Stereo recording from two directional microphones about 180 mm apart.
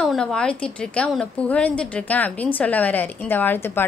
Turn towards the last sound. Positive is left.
turn(degrees=10)  # may be behind; listen again after turning